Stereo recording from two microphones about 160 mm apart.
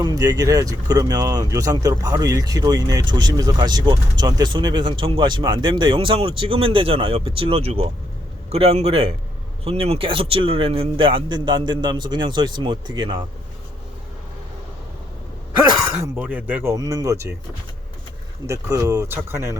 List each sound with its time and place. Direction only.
0.0 s a man's voice: 25° right (ahead or behind)
16.1 s speech: 10° right (ahead or behind)
18.4 s speech: 20° right (ahead or behind)